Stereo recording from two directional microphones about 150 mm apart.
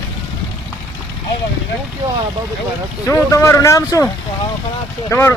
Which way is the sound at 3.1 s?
20° left (ahead or behind).